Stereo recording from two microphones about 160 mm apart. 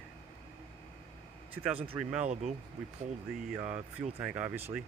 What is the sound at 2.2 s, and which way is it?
Speech, 45° right (ahead or behind).